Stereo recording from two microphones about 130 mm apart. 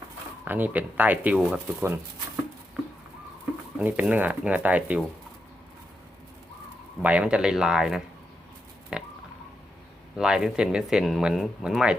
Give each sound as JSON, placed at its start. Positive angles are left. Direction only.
{"t": 0.4, "sound": "speech", "side_deg": -15}
{"t": 1.8, "sound": "speech", "side_deg": -20}
{"t": 3.8, "sound": "speech", "side_deg": -10}
{"t": 7.0, "sound": "speech", "side_deg": -10}
{"t": 8.9, "sound": "a sound", "side_deg": -5}
{"t": 10.2, "sound": "speech", "side_deg": -5}